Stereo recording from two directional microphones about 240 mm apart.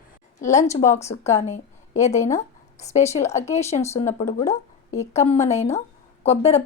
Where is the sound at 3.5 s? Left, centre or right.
Left.